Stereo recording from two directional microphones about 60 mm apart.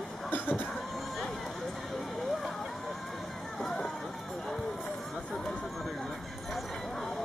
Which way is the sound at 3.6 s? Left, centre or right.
Centre.